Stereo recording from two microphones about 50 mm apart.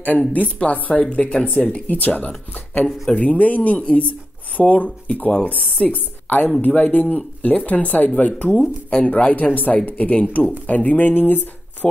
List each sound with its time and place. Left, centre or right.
0.0 s speech: left